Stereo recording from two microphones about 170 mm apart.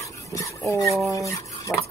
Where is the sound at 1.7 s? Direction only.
15° left (ahead or behind).